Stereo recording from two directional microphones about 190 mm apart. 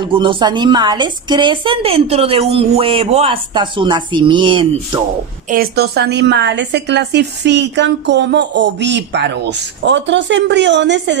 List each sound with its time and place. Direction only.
0.0 s a woman's voice: 25° right (ahead or behind)
5.5 s a woman's voice: 55° right (ahead or behind)